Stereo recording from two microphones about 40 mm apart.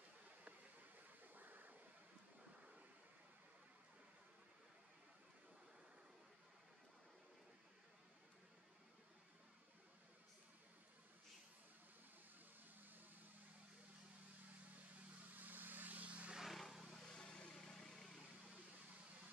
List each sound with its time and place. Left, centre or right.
1.2 s vehicle: right
12.8 s vehicle: right
15.3 s vehicle: right
16.5 s vehicle: centre
17.1 s vehicle: left; by 18.2 s centre